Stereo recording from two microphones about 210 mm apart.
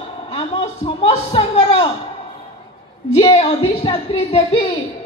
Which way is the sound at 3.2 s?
25° left (ahead or behind).